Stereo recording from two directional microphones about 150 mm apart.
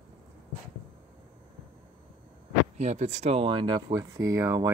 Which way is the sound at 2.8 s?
50° right (ahead or behind).